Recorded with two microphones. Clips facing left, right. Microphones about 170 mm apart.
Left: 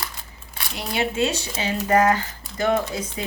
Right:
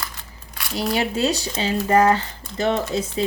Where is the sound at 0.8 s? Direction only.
40° right (ahead or behind).